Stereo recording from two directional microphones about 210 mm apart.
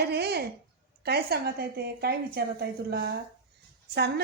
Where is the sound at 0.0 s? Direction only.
50° right (ahead or behind).